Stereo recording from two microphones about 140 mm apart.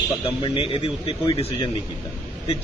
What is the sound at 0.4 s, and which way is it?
A man's voice, 40° left (ahead or behind).